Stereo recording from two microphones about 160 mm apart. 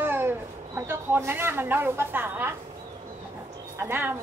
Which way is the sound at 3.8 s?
15° right (ahead or behind).